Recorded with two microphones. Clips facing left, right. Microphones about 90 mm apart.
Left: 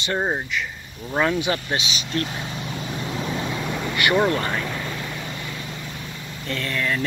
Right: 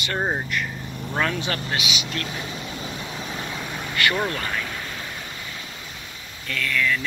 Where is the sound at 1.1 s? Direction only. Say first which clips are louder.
Left 4 dB; 20° left (ahead or behind).